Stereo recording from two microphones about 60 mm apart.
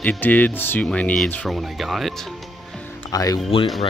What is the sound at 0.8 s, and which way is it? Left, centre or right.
Speech, left.